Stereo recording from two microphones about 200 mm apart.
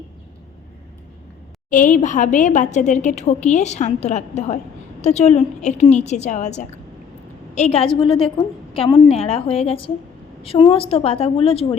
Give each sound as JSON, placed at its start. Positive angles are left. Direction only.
{"t": 1.7, "sound": "a woman's voice", "side_deg": 40}